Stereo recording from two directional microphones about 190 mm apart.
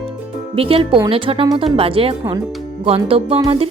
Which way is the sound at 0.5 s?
30° right (ahead or behind).